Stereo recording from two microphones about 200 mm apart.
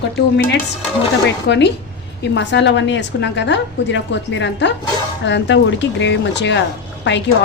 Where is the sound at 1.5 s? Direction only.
60° left (ahead or behind).